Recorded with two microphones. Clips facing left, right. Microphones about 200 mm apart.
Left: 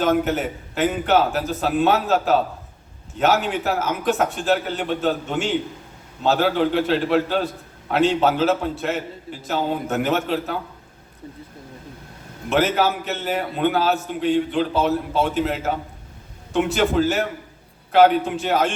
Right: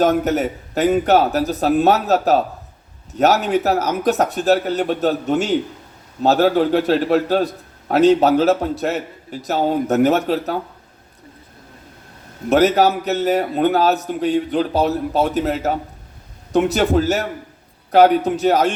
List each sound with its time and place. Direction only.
0.0 s a man's voice: 40° right (ahead or behind)
12.5 s a man's voice: 40° right (ahead or behind)